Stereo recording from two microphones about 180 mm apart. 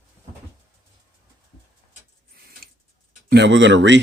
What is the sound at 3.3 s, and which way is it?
Speech, 75° right (ahead or behind).